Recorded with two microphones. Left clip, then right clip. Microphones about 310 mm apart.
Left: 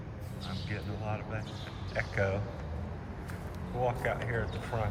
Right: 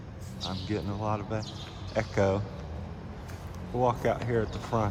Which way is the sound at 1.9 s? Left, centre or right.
Right.